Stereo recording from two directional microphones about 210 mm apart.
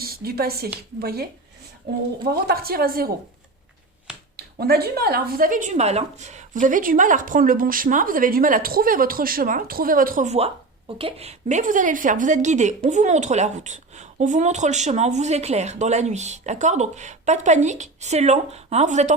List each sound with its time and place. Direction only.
0.0 s a woman's voice: 45° right (ahead or behind)
4.4 s speech: 50° right (ahead or behind)